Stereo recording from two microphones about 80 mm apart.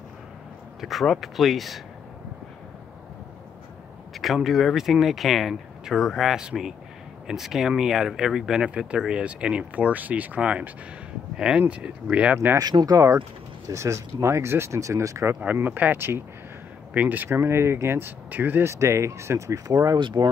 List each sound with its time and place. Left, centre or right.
0.7 s speech: centre
4.1 s speech: centre
12.5 s speech: right
15.4 s speech: right
17.3 s speech: right
18.7 s speech: right
20.0 s speech: right